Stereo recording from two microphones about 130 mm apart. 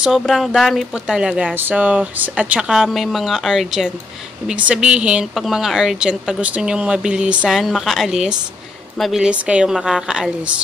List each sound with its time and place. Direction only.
0.0 s speech: centre (ahead or behind)